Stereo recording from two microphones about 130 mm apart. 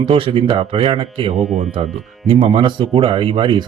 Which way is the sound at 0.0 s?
45° right (ahead or behind).